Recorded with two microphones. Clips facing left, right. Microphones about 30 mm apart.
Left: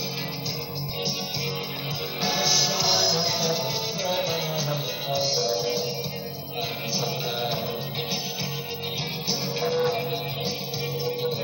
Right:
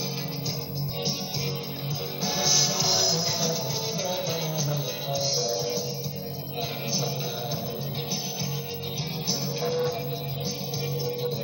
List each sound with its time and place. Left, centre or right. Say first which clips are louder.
2.2 s music: left 2 dB; centre
9.6 s music: left 4 dB; left